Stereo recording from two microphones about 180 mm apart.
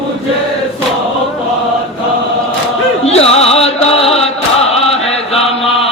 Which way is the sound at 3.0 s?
35° left (ahead or behind).